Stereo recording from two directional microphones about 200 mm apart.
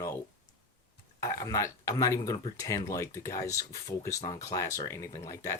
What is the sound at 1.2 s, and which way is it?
Speech, 15° left (ahead or behind).